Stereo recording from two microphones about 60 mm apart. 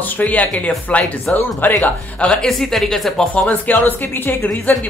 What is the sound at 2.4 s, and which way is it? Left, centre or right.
Speech, centre.